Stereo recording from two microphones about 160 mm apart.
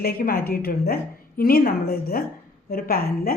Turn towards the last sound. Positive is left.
turn(degrees=70)  # may be behind; listen again after turning